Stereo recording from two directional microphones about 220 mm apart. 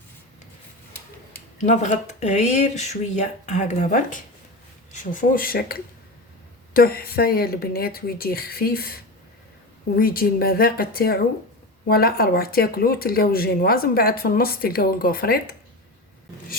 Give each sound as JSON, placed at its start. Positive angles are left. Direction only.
{"t": 1.6, "sound": "speech", "side_deg": 30}